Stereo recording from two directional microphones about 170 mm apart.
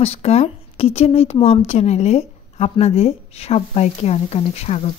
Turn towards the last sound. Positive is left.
turn(degrees=40)  # may be behind; listen again after turning